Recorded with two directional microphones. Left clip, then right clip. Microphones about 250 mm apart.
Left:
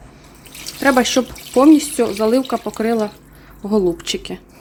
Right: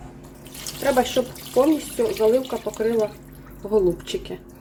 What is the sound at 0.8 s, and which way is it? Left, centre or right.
Speech, left.